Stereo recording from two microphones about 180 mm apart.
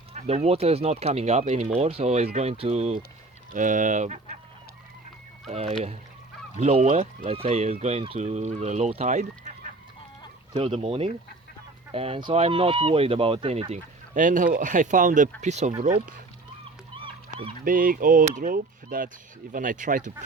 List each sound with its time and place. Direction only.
0.1 s speech: 35° right (ahead or behind)
3.5 s speech: 45° right (ahead or behind)
5.5 s speech: 35° right (ahead or behind)
10.5 s speech: 30° right (ahead or behind)
16.9 s goose: 30° right (ahead or behind)
17.6 s speech: 50° right (ahead or behind)